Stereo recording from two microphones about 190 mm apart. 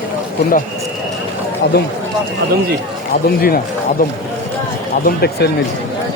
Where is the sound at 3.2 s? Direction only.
50° left (ahead or behind).